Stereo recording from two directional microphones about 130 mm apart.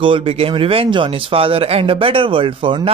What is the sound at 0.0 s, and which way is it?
Speech, 40° right (ahead or behind).